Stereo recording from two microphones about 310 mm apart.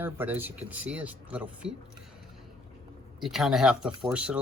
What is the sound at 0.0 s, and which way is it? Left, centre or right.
Speech, centre.